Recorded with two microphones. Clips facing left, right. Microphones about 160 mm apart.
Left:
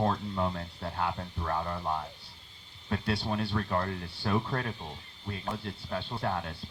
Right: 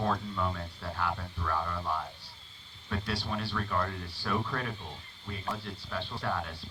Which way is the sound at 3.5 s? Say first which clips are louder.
Left 2 dB; 40° left (ahead or behind).